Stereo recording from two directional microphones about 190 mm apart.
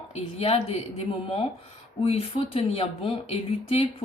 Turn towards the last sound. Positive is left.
turn(degrees=30)  # may be behind; listen again after turning